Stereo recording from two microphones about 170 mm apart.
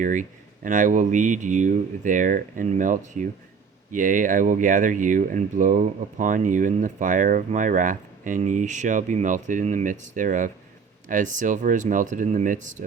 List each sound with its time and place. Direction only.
0.0 s speech: 50° right (ahead or behind)